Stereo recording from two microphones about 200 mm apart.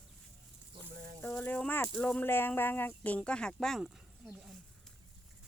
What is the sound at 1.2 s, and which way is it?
Speech, 10° left (ahead or behind).